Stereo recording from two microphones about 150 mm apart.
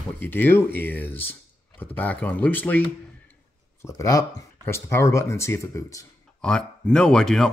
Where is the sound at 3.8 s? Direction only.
20° left (ahead or behind).